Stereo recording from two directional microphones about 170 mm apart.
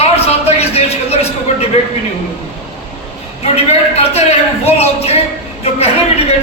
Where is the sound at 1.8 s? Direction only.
40° left (ahead or behind).